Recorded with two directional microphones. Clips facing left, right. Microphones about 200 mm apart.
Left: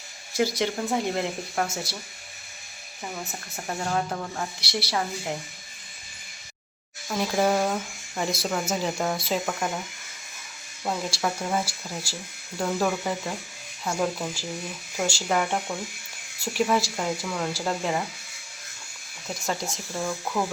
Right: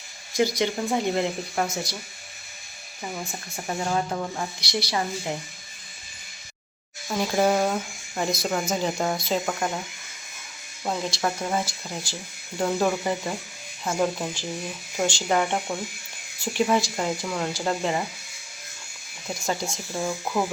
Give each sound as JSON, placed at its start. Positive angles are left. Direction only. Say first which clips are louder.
{"t": 0.3, "sound": "speech", "louder": "right 2 dB", "side_deg": 5}
{"t": 3.5, "sound": "speech", "louder": "right 2 dB", "side_deg": -5}
{"t": 4.6, "sound": "speech", "louder": "right 1 dB", "side_deg": 5}
{"t": 7.1, "sound": "speech", "louder": "right 1 dB", "side_deg": 0}
{"t": 9.5, "sound": "speech", "louder": "right 1 dB", "side_deg": -5}
{"t": 10.8, "sound": "speech", "louder": "right 1 dB", "side_deg": 0}
{"t": 19.3, "sound": "speech", "louder": "right 2 dB", "side_deg": 0}
{"t": 20.0, "sound": "speech", "louder": "right 2 dB", "side_deg": -10}